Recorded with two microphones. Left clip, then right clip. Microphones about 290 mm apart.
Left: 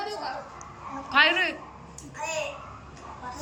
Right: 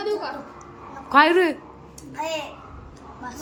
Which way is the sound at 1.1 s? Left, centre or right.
Centre.